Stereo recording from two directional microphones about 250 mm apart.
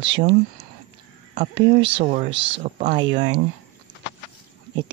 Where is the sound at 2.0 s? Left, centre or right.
Right.